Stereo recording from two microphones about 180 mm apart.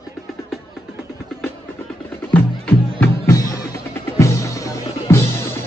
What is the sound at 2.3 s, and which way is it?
Music, 10° left (ahead or behind).